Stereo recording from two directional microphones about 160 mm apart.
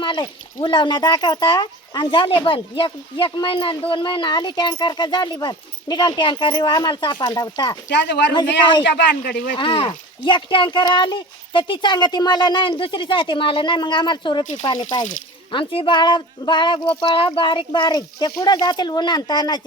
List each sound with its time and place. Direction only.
0.0 s speech: 30° left (ahead or behind)
7.9 s speech: 90° left
9.6 s speech: 35° left (ahead or behind)
15.5 s speech: 30° left (ahead or behind)